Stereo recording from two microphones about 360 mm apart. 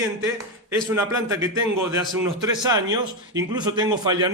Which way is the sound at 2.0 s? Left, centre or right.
Centre.